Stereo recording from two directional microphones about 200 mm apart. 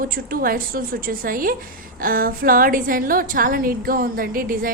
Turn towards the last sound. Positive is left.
turn(degrees=-45)  # may be behind; listen again after turning